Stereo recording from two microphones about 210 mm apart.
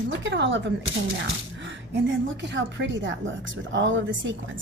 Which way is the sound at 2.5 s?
60° right (ahead or behind).